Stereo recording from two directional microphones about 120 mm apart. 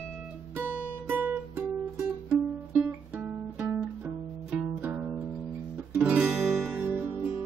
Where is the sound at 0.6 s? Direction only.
20° right (ahead or behind).